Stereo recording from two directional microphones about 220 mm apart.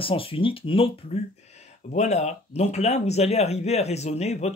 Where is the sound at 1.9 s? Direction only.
30° left (ahead or behind).